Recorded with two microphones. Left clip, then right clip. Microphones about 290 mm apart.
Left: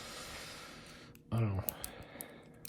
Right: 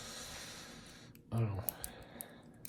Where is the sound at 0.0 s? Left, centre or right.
Left.